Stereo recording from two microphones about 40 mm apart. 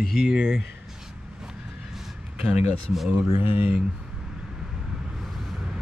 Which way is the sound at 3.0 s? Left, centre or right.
Right.